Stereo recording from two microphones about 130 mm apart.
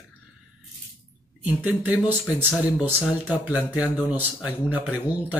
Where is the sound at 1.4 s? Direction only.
15° right (ahead or behind).